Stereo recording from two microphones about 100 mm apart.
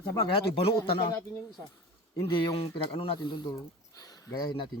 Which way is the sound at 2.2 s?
60° left (ahead or behind).